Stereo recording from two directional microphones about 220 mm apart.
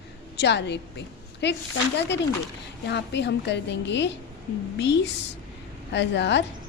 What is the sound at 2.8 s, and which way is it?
Speech, 50° left (ahead or behind).